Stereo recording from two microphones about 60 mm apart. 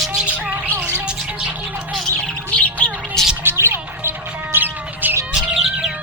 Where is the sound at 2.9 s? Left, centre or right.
Centre.